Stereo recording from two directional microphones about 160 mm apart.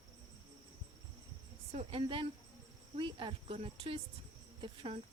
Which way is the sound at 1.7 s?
35° right (ahead or behind).